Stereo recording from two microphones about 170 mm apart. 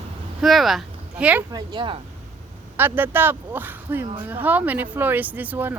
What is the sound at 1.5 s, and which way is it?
Speech, 25° right (ahead or behind).